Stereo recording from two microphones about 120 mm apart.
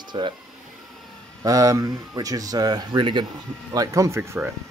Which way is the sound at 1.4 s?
30° right (ahead or behind).